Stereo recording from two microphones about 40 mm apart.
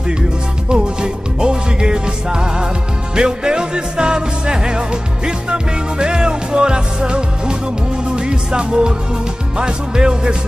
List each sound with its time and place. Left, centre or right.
0.7 s music: right